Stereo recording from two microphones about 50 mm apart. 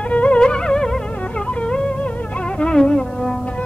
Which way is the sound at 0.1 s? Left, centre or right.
Left.